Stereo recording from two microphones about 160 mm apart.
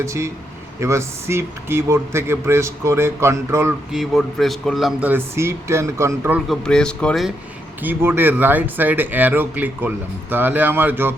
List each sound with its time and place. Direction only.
0.0 s speech: 20° right (ahead or behind)
3.9 s speech: centre (ahead or behind); by 6.4 s 15° right (ahead or behind)
6.5 s speech: 5° left (ahead or behind)
7.8 s speech: 15° right (ahead or behind)